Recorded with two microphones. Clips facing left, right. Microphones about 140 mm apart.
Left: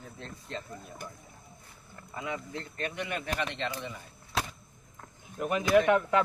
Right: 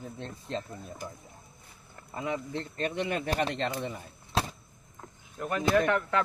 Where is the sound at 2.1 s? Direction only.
30° right (ahead or behind).